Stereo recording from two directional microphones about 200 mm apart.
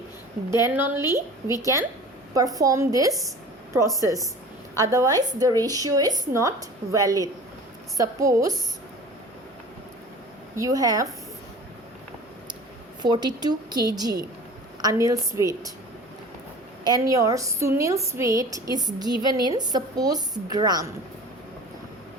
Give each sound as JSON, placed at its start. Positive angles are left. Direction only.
{"t": 0.5, "sound": "a woman's voice", "side_deg": -10}
{"t": 10.5, "sound": "a woman's voice", "side_deg": -15}
{"t": 13.0, "sound": "a woman's voice", "side_deg": -20}
{"t": 16.8, "sound": "a woman's voice", "side_deg": -20}